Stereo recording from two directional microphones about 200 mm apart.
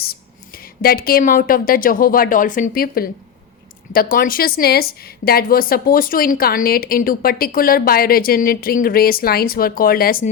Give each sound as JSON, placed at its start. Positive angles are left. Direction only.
{"t": 0.0, "sound": "a woman's voice", "side_deg": 50}